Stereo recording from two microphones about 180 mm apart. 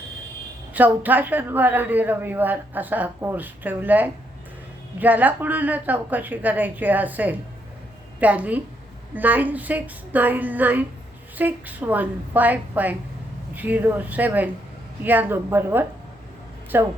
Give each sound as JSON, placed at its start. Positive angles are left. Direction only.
{"t": 0.7, "sound": "a woman's voice", "side_deg": -10}